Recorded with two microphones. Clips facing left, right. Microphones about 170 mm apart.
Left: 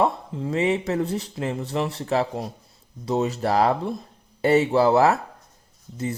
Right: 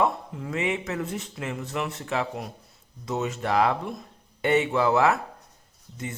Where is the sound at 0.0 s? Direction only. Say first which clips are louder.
Left 3 dB; 30° left (ahead or behind).